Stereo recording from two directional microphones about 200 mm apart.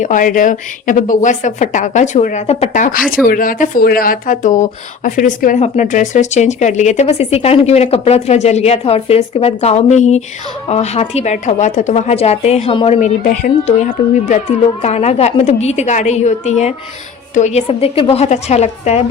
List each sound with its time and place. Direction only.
0.0 s speech: 40° left (ahead or behind)